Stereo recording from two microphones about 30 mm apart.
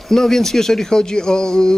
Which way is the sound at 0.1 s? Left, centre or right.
Centre.